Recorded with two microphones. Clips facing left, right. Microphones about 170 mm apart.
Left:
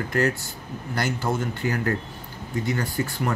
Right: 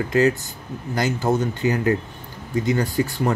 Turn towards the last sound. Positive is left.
turn(degrees=-20)  # may be behind; listen again after turning